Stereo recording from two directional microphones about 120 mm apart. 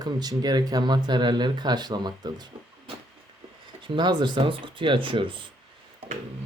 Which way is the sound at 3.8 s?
40° right (ahead or behind).